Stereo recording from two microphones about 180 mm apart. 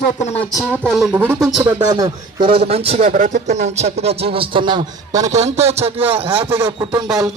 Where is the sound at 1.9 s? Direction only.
25° right (ahead or behind).